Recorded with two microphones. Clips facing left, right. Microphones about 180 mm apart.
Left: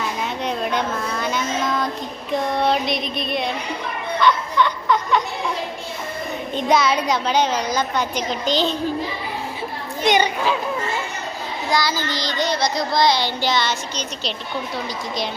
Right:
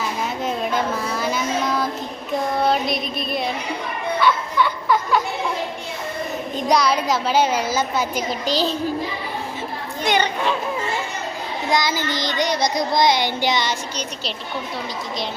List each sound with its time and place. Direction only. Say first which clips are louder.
0.0 s a sound: even; centre (ahead or behind)
2.3 s child singing: even; centre (ahead or behind)
4.2 s music: left 2 dB; 5° right (ahead or behind)
6.7 s a woman's voice: even; centre (ahead or behind)
10.0 s a child's voice: left 3 dB; 20° left (ahead or behind)
11.7 s child singing: right 1 dB; 20° right (ahead or behind)